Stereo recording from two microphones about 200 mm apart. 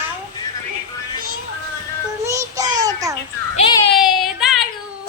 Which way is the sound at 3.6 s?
30° left (ahead or behind).